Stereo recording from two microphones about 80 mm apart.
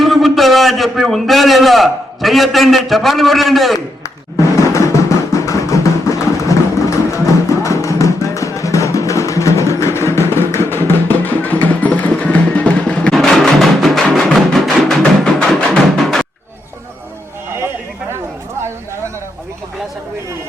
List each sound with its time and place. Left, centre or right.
0.0 s a man's voice: centre
4.7 s music: left; by 13.1 s centre
13.1 s music: centre